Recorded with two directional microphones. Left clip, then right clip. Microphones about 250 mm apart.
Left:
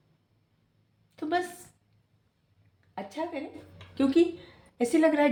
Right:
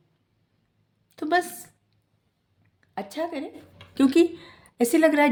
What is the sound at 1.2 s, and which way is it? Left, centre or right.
Speech, right.